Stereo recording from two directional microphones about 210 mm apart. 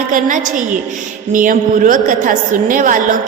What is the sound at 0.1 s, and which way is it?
A woman's voice, 40° right (ahead or behind).